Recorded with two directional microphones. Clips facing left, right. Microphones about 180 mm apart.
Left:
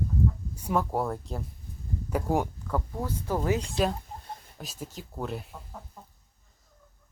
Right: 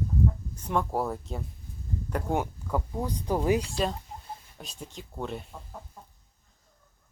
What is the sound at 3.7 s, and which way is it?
Speech, 5° left (ahead or behind).